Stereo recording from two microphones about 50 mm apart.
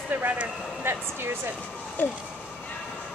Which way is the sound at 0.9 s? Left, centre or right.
Right.